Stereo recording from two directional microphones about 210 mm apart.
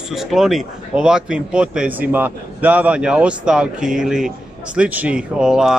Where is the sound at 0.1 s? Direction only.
Centre (ahead or behind).